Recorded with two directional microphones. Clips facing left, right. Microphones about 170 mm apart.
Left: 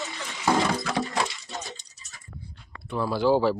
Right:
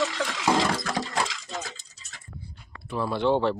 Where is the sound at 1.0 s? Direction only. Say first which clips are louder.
Left 1 dB; 90° right.